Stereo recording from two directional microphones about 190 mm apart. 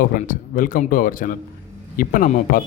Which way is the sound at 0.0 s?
45° left (ahead or behind).